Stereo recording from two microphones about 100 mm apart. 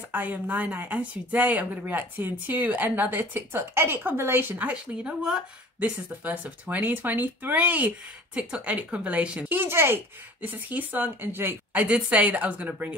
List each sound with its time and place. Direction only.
0.1 s speech: 15° right (ahead or behind)